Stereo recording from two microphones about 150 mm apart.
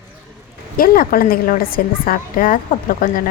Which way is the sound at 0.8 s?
70° left (ahead or behind).